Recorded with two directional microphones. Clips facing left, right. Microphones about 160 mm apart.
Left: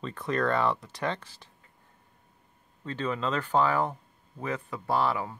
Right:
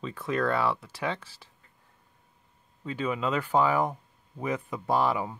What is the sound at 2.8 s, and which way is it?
Speech, 10° right (ahead or behind).